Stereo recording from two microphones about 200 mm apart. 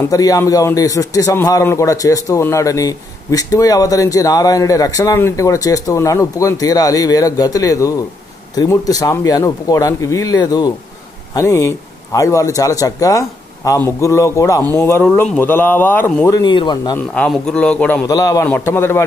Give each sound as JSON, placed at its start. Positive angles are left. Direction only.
{"t": 0.1, "sound": "a man's voice", "side_deg": 15}
{"t": 17.1, "sound": "a man's voice", "side_deg": 5}
{"t": 18.0, "sound": "a man's voice", "side_deg": 15}